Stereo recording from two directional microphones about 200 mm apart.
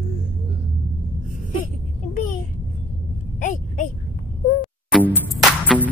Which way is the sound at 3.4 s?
40° left (ahead or behind).